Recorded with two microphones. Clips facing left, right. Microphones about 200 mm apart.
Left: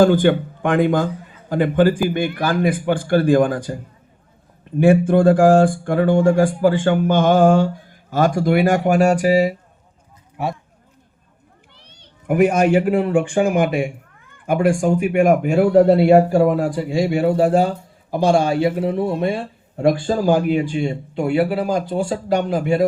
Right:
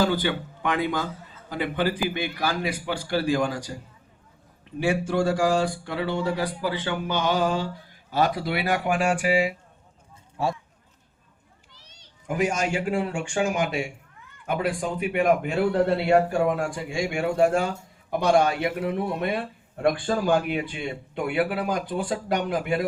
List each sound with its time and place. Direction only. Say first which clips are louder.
0.0 s a man's voice: left 10 dB; 50° left (ahead or behind)
11.7 s a child's voice: left 6 dB; 60° left (ahead or behind)
15.6 s speech: left 11 dB; 70° left (ahead or behind)
16.1 s a man's voice: left 7 dB; 35° left (ahead or behind)